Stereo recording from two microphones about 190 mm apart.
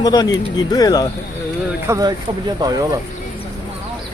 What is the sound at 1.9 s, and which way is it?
Speech, 20° right (ahead or behind).